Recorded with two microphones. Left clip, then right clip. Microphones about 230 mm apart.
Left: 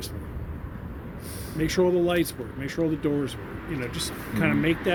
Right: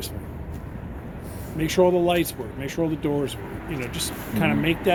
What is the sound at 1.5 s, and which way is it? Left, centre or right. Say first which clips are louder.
Speech: right 3 dB; left.